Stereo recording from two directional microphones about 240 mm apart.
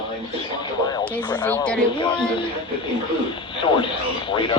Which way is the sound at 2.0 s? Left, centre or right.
Centre.